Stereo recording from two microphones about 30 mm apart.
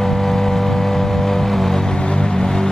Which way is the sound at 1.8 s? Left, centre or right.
Left.